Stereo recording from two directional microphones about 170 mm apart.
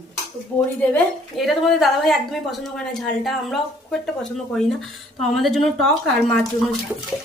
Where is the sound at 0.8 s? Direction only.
5° left (ahead or behind).